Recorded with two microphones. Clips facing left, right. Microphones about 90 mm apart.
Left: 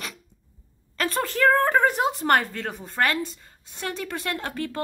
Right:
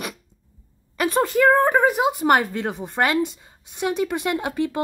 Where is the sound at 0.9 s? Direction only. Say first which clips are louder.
Right 6 dB; 15° right (ahead or behind).